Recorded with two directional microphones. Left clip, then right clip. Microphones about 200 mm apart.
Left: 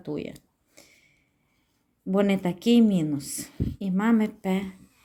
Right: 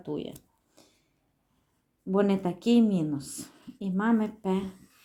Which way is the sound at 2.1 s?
25° left (ahead or behind).